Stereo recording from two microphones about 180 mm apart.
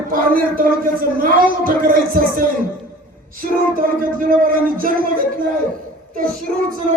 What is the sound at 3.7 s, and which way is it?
Speech, 50° right (ahead or behind).